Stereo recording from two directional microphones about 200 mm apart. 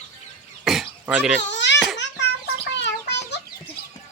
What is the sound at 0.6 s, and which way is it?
Cough, centre (ahead or behind).